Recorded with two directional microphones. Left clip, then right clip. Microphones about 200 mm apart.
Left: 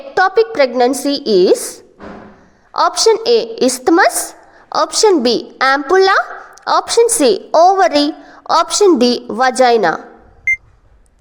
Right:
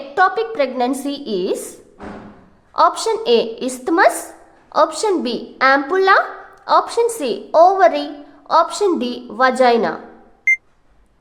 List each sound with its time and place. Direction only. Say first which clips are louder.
0.1 s a woman's voice: left 4 dB; 30° left (ahead or behind)
10.5 s beep: even; centre (ahead or behind)